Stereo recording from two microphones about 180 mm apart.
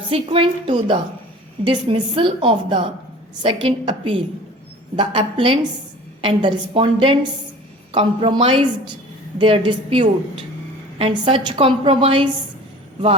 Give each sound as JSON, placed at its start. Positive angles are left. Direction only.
{"t": 0.1, "sound": "a woman's voice", "side_deg": -30}